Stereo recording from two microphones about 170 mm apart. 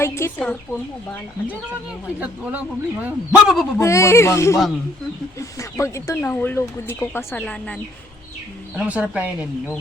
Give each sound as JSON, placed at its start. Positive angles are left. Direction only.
{"t": 0.0, "sound": "speech", "side_deg": 15}
{"t": 2.1, "sound": "speech", "side_deg": -10}
{"t": 3.8, "sound": "speech", "side_deg": 15}
{"t": 8.7, "sound": "speech", "side_deg": -10}